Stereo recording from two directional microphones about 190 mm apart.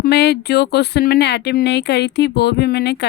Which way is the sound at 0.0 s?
60° left (ahead or behind).